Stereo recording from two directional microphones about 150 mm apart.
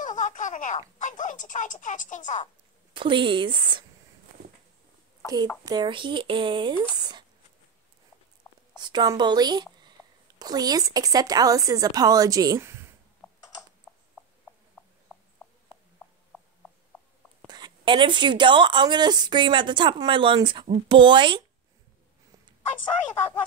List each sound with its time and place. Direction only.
0.0 s speech: 55° left (ahead or behind)
2.9 s speech: 35° right (ahead or behind)
5.6 s speech: 30° right (ahead or behind)
8.7 s speech: 30° right (ahead or behind)
13.9 s a sound: 5° left (ahead or behind)
17.5 s speech: 30° right (ahead or behind)